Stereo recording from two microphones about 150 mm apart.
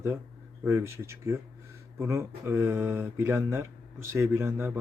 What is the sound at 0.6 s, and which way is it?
A man's voice, 15° right (ahead or behind).